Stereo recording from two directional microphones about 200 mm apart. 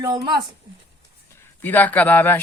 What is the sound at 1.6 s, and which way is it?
Speech, 10° left (ahead or behind).